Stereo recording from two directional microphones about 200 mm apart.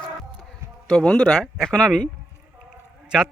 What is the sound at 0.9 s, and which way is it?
A man's voice, 10° left (ahead or behind).